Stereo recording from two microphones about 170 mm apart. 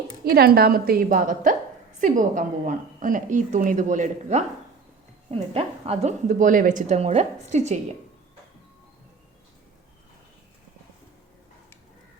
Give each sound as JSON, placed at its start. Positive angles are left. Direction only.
{"t": 0.3, "sound": "a woman's voice", "side_deg": -65}